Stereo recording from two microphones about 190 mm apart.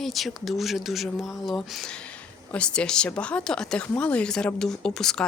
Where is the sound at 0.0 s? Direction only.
Centre (ahead or behind).